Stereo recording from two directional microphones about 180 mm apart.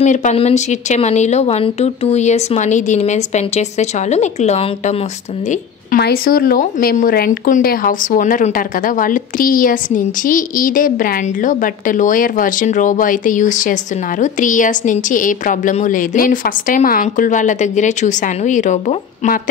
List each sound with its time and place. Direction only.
0.0 s speech: 40° left (ahead or behind)
5.5 s speech: 55° left (ahead or behind)